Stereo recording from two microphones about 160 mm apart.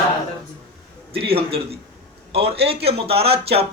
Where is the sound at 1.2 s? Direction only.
35° right (ahead or behind).